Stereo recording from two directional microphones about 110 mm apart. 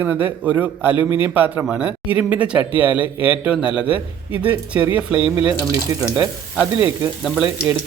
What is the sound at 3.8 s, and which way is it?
Speech, 50° left (ahead or behind).